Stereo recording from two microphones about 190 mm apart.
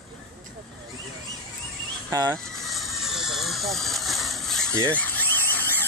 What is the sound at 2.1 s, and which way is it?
Speech, 20° right (ahead or behind).